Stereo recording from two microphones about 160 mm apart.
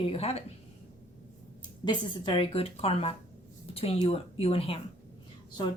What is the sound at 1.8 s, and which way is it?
A woman's voice, 30° left (ahead or behind).